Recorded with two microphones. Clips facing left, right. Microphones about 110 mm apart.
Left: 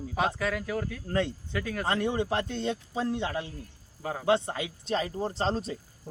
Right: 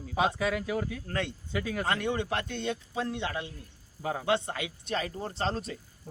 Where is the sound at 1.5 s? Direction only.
10° right (ahead or behind).